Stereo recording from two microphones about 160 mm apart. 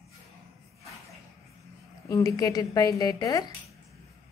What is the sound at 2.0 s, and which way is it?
Speech, 20° left (ahead or behind).